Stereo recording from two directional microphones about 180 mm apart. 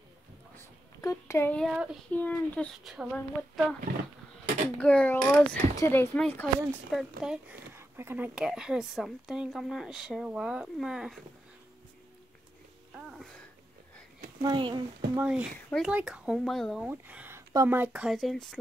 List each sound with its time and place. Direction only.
1.0 s speech: 15° left (ahead or behind)
1.6 s speech: 5° right (ahead or behind)
2.1 s speech: 10° left (ahead or behind)
4.7 s speech: 10° left (ahead or behind)
7.9 s speech: 10° right (ahead or behind)
12.9 s a sound: centre (ahead or behind)
14.4 s speech: 25° right (ahead or behind)
15.1 s speech: 5° right (ahead or behind)
16.8 s speech: 10° right (ahead or behind)